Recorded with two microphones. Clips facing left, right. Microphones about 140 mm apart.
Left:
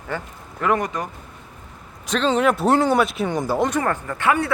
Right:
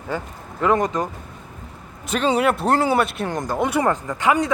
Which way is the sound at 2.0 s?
10° right (ahead or behind).